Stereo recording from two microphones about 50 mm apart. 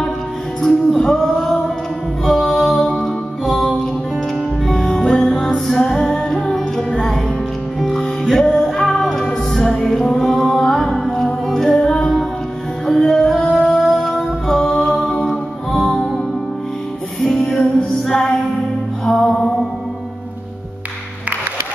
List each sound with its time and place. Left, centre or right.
0.6 s music: centre
17.2 s music: centre